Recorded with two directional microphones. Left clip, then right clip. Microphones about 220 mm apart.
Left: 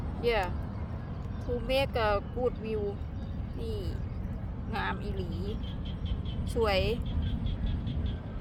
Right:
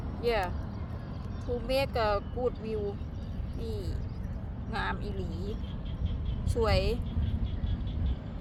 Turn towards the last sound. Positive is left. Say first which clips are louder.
# left 1 dB
turn(degrees=0)  # may be behind; listen again after turning